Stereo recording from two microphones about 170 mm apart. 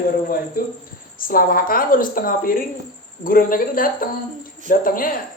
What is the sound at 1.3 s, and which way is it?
Speech, 55° left (ahead or behind).